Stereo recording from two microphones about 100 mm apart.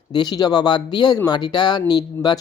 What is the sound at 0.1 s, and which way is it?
Speech, 45° left (ahead or behind).